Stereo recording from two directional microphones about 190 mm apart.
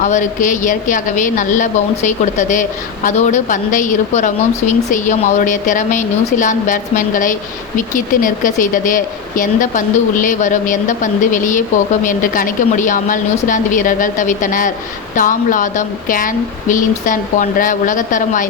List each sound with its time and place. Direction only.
0.0 s a woman's voice: 40° left (ahead or behind)